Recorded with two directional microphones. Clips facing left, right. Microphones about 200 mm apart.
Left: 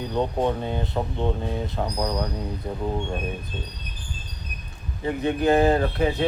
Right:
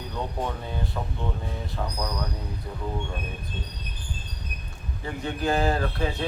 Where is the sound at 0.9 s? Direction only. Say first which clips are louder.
Left 7 dB; 30° left (ahead or behind).